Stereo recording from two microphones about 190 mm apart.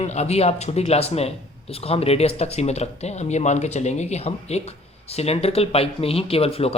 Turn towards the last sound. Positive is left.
turn(degrees=30)  # may be behind; listen again after turning